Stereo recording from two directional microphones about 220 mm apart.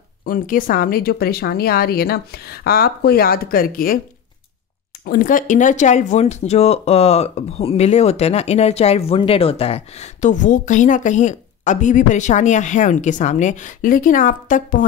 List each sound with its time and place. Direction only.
0.2 s speech: 40° left (ahead or behind)
5.0 s speech: 40° left (ahead or behind)